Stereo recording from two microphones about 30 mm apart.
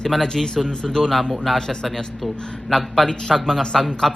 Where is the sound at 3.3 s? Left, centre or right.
Centre.